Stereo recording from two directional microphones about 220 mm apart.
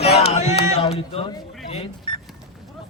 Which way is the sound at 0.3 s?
30° left (ahead or behind).